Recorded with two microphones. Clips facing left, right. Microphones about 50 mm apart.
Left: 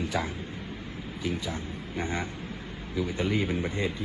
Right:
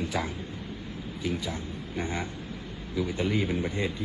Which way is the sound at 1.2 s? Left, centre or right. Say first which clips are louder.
Even; left.